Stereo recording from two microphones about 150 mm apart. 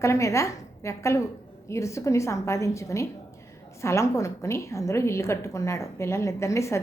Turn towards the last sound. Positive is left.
turn(degrees=20)  # may be behind; listen again after turning